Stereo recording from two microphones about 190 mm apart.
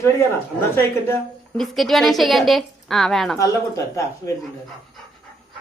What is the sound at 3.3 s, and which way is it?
Speech, 15° left (ahead or behind).